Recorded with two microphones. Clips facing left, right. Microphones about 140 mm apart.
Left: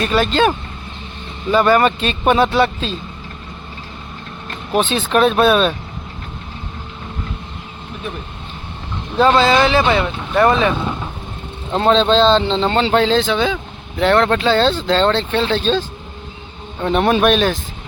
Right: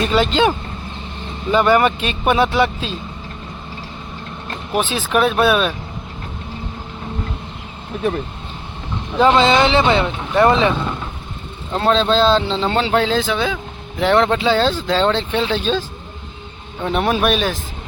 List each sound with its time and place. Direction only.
0.0 s speech: 20° right (ahead or behind)
4.7 s speech: 5° right (ahead or behind)
9.1 s speech: 20° right (ahead or behind)
11.8 s speech: 5° right (ahead or behind)
16.8 s speech: 5° right (ahead or behind)